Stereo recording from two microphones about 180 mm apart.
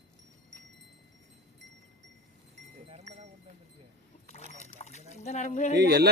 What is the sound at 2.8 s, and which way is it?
Livestock, 35° right (ahead or behind).